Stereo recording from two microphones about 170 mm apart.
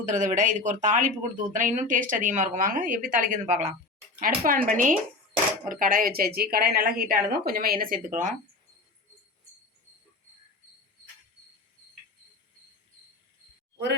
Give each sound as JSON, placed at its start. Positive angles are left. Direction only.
{"t": 0.0, "sound": "speech", "side_deg": -45}
{"t": 4.2, "sound": "a woman's voice", "side_deg": -55}